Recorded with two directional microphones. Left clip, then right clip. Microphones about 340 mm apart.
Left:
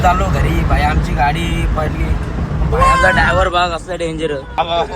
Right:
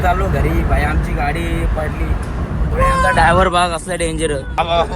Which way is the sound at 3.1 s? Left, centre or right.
Centre.